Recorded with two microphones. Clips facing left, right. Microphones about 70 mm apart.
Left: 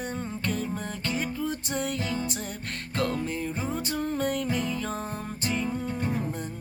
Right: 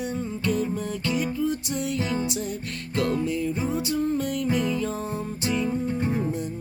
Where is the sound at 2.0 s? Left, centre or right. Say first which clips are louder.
Right 4 dB; right.